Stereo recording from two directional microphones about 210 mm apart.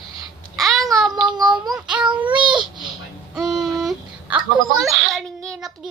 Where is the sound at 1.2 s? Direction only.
20° right (ahead or behind).